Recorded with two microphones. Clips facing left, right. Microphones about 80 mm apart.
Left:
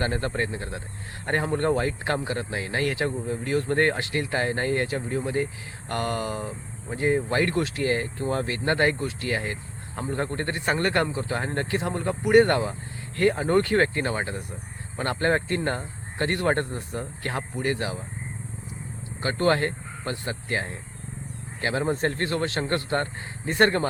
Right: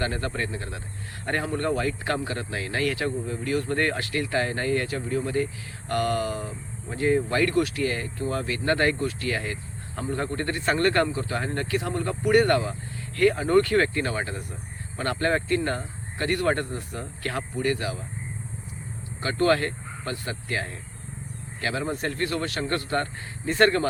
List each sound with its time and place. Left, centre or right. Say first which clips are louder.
0.0 s speech: left 2 dB; left
19.2 s speech: even; left